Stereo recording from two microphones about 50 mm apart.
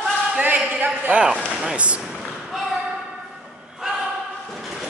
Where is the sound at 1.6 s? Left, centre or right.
Right.